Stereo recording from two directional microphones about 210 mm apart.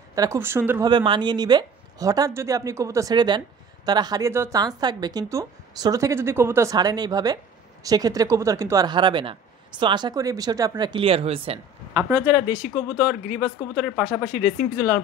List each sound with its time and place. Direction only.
0.1 s speech: 15° right (ahead or behind)
12.0 s speech: 15° right (ahead or behind)